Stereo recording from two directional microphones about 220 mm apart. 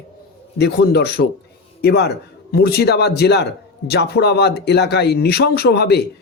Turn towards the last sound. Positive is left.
turn(degrees=50)  # may be behind; listen again after turning